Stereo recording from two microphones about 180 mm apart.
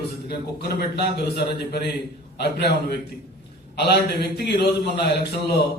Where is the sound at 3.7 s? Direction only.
65° left (ahead or behind).